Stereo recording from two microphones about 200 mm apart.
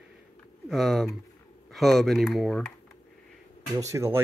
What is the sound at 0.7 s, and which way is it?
Speech, centre (ahead or behind).